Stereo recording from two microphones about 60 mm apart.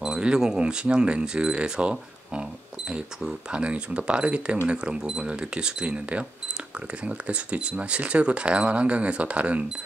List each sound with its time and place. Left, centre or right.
0.0 s speech: centre